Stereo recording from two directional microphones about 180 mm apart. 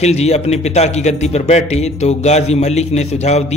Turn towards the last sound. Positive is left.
turn(degrees=40)  # may be behind; listen again after turning